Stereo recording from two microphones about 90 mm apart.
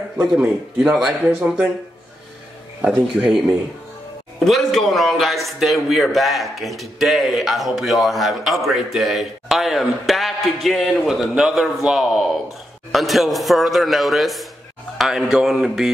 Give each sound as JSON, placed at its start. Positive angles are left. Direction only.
{"t": 0.2, "sound": "a man's voice", "side_deg": -5}
{"t": 2.8, "sound": "a man's voice", "side_deg": -15}
{"t": 4.5, "sound": "a man's voice", "side_deg": 0}